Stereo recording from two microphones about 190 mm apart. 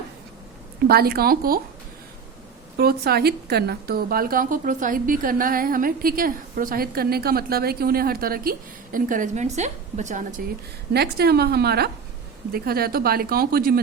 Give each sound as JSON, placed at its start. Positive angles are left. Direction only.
{"t": 0.9, "sound": "a woman's voice", "side_deg": -55}
{"t": 2.7, "sound": "a woman's voice", "side_deg": -55}
{"t": 10.9, "sound": "a woman's voice", "side_deg": -55}